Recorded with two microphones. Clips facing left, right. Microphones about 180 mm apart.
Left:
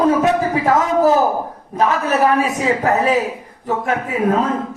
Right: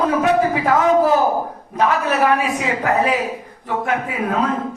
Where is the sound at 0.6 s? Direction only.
45° left (ahead or behind).